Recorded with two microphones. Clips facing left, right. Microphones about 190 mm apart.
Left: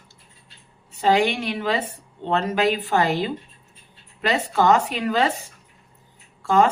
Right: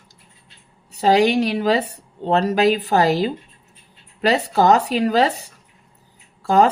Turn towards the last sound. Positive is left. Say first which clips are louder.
# right 3 dB
turn(degrees=-35)  # may be behind; listen again after turning